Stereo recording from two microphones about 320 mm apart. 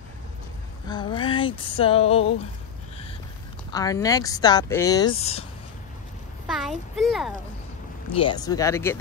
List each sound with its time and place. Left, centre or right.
0.8 s speech: centre
3.7 s speech: centre
6.4 s a sound: centre
8.1 s speech: centre